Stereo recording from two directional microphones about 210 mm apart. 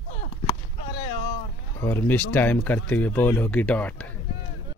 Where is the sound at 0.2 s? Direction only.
25° left (ahead or behind).